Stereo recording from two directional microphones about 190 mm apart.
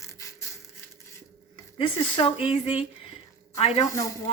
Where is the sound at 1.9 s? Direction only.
25° left (ahead or behind).